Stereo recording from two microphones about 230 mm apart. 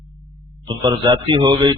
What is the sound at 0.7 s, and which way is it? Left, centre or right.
A man's voice, centre.